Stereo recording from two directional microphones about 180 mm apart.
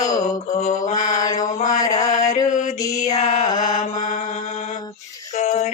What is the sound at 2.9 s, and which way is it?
Mantra, 20° left (ahead or behind).